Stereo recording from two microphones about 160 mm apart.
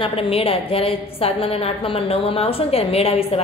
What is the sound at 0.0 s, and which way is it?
A man's voice, 35° left (ahead or behind).